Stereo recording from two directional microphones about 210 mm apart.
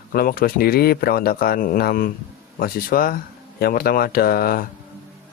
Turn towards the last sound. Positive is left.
turn(degrees=45)  # may be behind; listen again after turning